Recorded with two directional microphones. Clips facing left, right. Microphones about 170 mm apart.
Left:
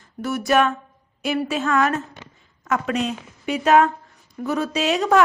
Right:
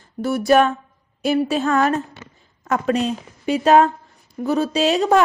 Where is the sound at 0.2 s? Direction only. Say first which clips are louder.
Right 4 dB; 30° right (ahead or behind).